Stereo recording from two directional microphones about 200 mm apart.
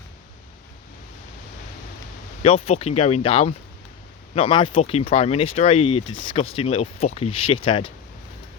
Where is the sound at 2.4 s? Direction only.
30° left (ahead or behind).